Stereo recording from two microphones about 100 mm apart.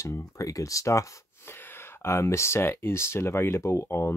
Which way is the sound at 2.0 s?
25° left (ahead or behind).